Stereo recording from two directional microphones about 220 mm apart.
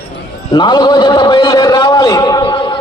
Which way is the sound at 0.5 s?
20° left (ahead or behind).